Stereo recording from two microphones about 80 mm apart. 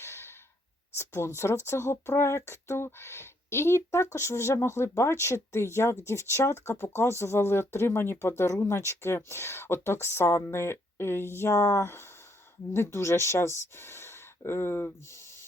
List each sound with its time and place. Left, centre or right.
0.0 s sigh: left
0.9 s speech: left